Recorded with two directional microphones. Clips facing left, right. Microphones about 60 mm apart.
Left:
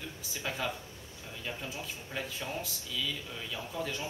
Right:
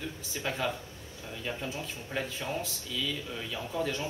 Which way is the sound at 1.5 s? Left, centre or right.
Centre.